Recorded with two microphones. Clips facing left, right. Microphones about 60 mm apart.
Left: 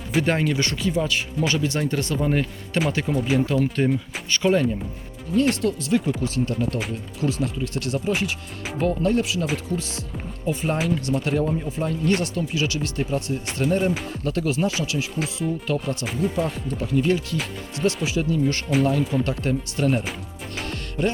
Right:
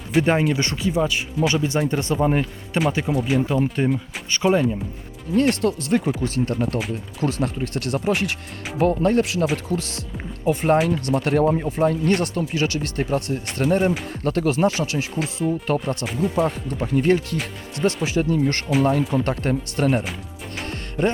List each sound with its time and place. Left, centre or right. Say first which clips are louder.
0.2 s speech: right 3 dB; centre
0.6 s speech: even; right
0.9 s speech: right 3 dB; centre
2.7 s speech: right 2 dB; centre
3.4 s speech: even; centre
5.4 s speech: right 2 dB; right
8.8 s speech: right 3 dB; right
13.7 s speech: right 3 dB; centre
14.1 s speech: right 3 dB; right
16.0 s speech: right 3 dB; centre
16.6 s speech: right 2 dB; right